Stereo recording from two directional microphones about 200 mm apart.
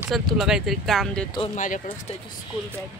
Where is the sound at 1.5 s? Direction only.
40° left (ahead or behind).